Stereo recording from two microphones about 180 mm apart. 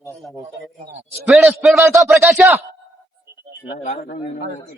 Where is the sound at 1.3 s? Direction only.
Centre (ahead or behind).